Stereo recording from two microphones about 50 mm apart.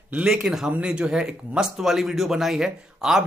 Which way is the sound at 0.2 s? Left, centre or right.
Centre.